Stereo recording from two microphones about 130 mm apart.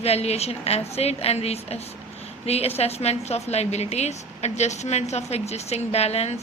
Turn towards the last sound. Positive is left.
turn(degrees=55)  # may be behind; listen again after turning